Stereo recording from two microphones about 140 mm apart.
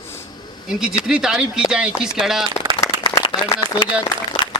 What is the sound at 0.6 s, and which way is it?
Speech, 5° right (ahead or behind).